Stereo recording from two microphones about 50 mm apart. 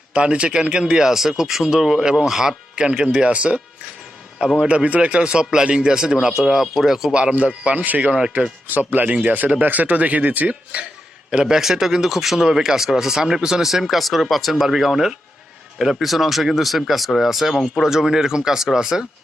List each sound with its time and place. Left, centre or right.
0.1 s speech: right
4.7 s speech: right
6.4 s speech: centre
7.1 s speech: right
11.3 s speech: centre